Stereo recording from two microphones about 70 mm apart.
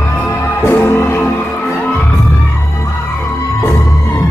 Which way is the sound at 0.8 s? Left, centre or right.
Left.